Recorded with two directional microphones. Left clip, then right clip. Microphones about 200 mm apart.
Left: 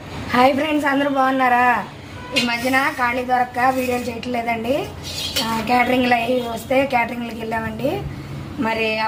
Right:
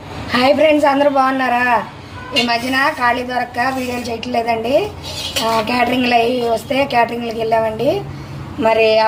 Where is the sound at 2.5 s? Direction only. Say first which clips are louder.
Right 2 dB; 15° left (ahead or behind).